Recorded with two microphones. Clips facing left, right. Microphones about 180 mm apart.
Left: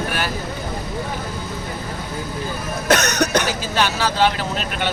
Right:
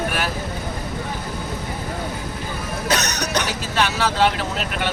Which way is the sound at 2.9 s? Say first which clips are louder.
Left 6 dB; 50° left (ahead or behind).